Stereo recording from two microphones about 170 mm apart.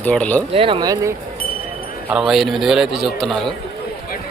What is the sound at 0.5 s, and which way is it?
Speech, 30° right (ahead or behind).